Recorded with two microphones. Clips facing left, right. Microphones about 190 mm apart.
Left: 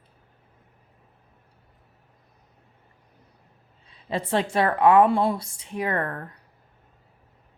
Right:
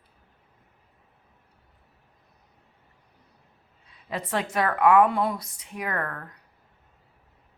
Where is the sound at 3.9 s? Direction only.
30° left (ahead or behind).